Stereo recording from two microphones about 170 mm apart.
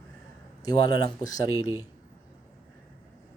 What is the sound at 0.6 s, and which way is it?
Speech, 25° left (ahead or behind).